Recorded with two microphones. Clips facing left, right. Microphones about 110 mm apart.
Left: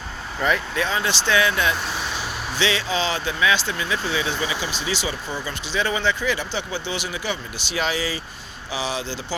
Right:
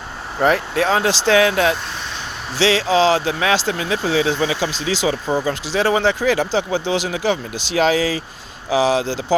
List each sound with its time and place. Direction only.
0.4 s speech: 65° right (ahead or behind)
1.3 s speech: 90° right